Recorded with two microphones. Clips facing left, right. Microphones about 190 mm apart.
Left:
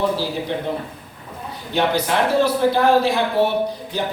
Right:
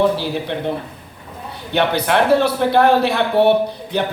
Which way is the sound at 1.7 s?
65° right (ahead or behind).